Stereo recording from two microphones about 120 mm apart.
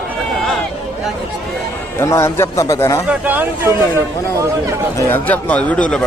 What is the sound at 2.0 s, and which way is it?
A man's voice, 20° left (ahead or behind).